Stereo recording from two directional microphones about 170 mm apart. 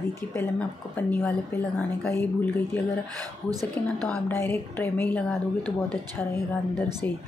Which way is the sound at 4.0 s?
10° left (ahead or behind).